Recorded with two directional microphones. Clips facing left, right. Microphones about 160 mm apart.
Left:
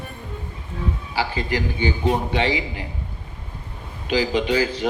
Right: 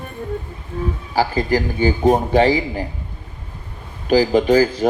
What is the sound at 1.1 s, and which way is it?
A man's voice, 40° right (ahead or behind).